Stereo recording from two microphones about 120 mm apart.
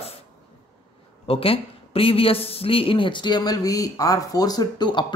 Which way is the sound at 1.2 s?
50° left (ahead or behind).